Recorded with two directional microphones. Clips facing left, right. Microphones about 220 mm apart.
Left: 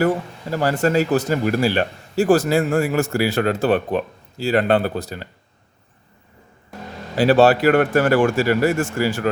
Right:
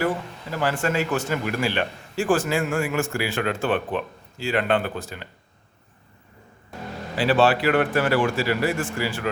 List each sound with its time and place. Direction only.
0.5 s a man's voice: 40° left (ahead or behind)
7.2 s speech: 40° left (ahead or behind)